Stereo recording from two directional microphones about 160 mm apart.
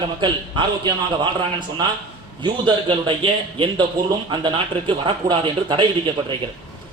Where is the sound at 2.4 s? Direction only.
30° right (ahead or behind).